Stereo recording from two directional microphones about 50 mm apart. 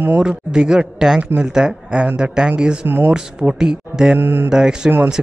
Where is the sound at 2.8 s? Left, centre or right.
Right.